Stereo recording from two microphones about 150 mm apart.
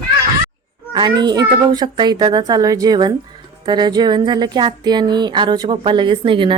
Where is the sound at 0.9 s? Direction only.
30° right (ahead or behind).